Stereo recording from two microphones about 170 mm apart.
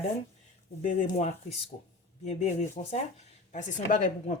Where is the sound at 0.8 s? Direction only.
50° left (ahead or behind).